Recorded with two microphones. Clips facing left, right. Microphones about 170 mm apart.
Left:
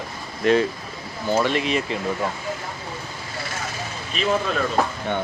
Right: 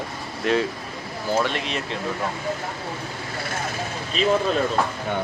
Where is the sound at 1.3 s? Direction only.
Centre (ahead or behind).